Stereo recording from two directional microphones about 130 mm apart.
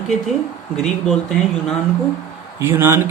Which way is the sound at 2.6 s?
20° right (ahead or behind).